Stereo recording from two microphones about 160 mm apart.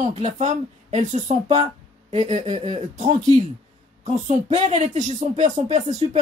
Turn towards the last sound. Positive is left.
turn(degrees=-45)  # may be behind; listen again after turning